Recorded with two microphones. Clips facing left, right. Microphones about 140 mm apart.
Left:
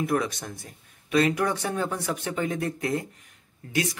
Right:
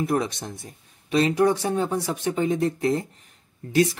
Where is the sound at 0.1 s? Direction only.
25° right (ahead or behind).